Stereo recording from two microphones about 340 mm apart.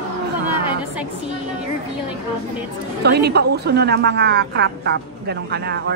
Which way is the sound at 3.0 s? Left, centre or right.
Right.